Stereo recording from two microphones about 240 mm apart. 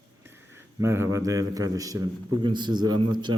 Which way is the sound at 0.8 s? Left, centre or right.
Centre.